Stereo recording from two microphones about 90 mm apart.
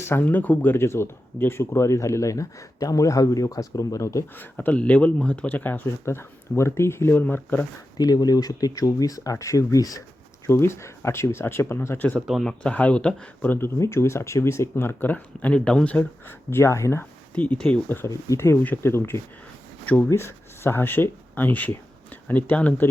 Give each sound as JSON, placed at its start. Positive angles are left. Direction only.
{"t": 0.0, "sound": "speech", "side_deg": 25}
{"t": 4.6, "sound": "speech", "side_deg": 15}
{"t": 7.9, "sound": "speech", "side_deg": 45}
{"t": 10.4, "sound": "speech", "side_deg": 30}
{"t": 12.3, "sound": "speech", "side_deg": 5}
{"t": 13.7, "sound": "speech", "side_deg": 35}
{"t": 17.0, "sound": "speech", "side_deg": 15}
{"t": 18.1, "sound": "speech", "side_deg": 35}
{"t": 19.8, "sound": "speech", "side_deg": 15}
{"t": 20.1, "sound": "speech", "side_deg": 30}